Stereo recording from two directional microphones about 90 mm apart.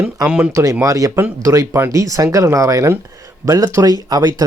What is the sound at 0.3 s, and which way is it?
Speech, 15° right (ahead or behind).